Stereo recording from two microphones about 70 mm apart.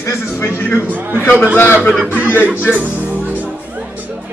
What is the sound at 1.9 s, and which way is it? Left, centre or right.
Speech, centre.